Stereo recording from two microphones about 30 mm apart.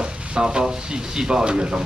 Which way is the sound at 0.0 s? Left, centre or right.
Right.